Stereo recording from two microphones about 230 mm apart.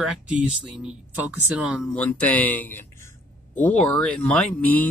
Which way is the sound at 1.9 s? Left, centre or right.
Centre.